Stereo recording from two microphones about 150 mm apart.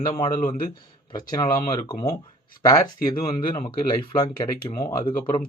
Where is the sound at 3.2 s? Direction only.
35° left (ahead or behind).